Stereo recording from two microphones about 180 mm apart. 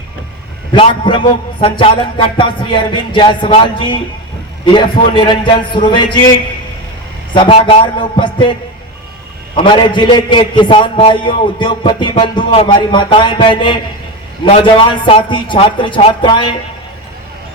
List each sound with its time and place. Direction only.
0.7 s a man's voice: 25° left (ahead or behind)
7.3 s a man's voice: 30° left (ahead or behind)
9.6 s a man's voice: 25° left (ahead or behind)